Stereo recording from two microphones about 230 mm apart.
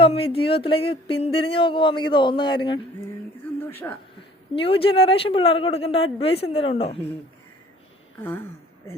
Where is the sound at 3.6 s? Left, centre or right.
Centre.